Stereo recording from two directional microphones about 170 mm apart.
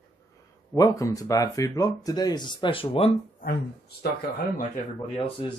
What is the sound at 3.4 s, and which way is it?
Speech, 65° left (ahead or behind).